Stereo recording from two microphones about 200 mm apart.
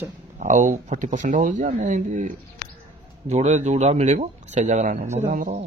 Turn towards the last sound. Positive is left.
turn(degrees=-35)  # may be behind; listen again after turning